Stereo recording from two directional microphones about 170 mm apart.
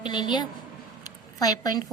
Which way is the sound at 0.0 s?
25° left (ahead or behind).